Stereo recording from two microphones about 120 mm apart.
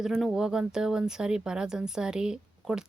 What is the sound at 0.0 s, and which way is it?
Speech, centre (ahead or behind).